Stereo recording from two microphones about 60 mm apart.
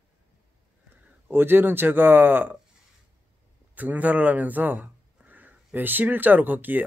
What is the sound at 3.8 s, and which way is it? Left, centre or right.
Speech, right.